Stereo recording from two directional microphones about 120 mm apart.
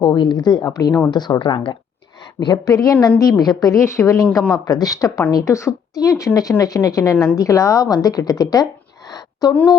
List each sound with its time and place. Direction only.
0.0 s a woman's voice: 40° left (ahead or behind)
2.4 s a woman's voice: 30° left (ahead or behind)
9.0 s a sound: 30° left (ahead or behind)